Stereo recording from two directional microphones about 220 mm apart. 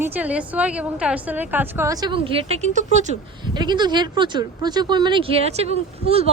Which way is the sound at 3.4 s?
20° right (ahead or behind).